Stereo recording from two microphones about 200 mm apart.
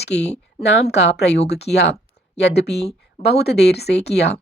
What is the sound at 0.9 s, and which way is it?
A woman's voice, 55° left (ahead or behind).